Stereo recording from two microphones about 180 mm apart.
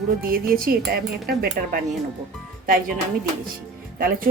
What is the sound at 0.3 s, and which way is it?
Speech, 55° right (ahead or behind).